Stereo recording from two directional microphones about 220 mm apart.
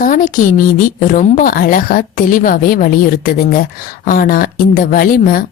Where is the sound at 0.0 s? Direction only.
40° left (ahead or behind).